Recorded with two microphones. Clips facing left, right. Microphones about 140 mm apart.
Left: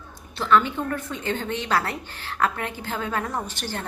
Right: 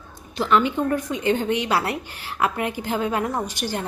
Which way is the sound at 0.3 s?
15° right (ahead or behind).